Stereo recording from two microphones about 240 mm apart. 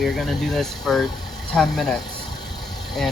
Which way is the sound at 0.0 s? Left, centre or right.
Centre.